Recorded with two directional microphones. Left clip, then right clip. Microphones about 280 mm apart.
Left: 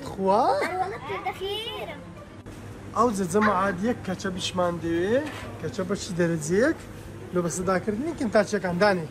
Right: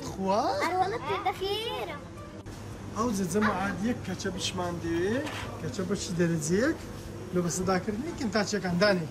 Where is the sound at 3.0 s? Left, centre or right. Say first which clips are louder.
Left 7 dB; centre.